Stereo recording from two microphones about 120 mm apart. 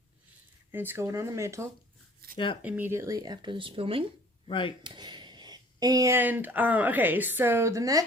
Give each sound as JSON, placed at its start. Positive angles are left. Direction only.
{"t": 0.7, "sound": "speech", "side_deg": -15}
{"t": 2.6, "sound": "speech", "side_deg": -15}
{"t": 4.4, "sound": "speech", "side_deg": 45}
{"t": 4.8, "sound": "a sound", "side_deg": -40}
{"t": 6.1, "sound": "a woman's voice", "side_deg": -15}